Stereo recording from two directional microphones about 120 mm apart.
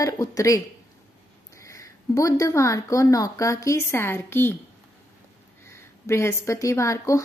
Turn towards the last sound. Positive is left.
turn(degrees=25)  # may be behind; listen again after turning